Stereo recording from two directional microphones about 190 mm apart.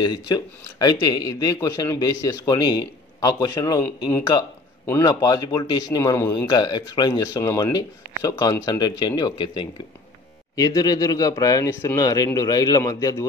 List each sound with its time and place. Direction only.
0.0 s a man's voice: 20° left (ahead or behind)